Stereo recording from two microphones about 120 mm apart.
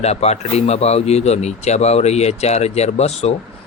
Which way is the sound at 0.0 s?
65° left (ahead or behind).